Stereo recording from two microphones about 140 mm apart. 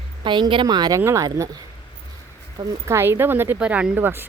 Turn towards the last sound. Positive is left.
turn(degrees=-15)  # may be behind; listen again after turning